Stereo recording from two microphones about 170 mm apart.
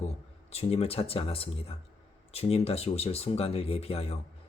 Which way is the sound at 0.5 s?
35° left (ahead or behind).